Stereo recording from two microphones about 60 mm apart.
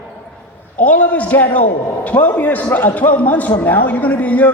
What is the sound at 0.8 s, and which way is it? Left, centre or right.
A man's voice, left.